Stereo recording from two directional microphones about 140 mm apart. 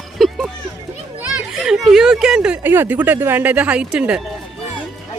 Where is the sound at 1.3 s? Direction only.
5° right (ahead or behind).